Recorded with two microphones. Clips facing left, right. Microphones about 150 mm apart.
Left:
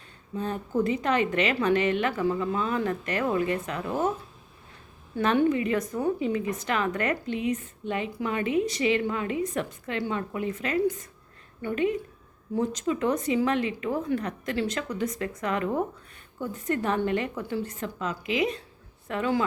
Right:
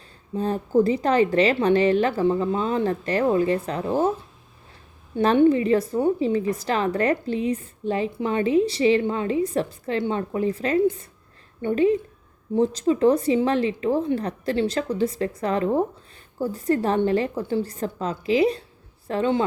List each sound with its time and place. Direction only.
0.3 s a woman's voice: 35° right (ahead or behind)
5.1 s a woman's voice: 30° right (ahead or behind)